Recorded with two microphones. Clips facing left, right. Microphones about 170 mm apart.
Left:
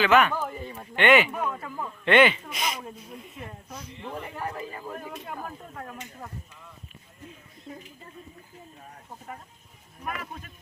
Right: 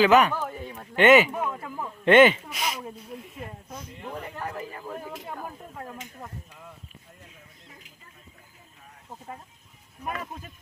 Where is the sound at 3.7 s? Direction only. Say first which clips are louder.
Even; 50° right (ahead or behind).